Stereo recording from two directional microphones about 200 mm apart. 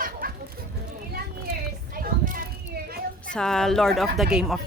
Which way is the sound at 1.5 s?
45° right (ahead or behind).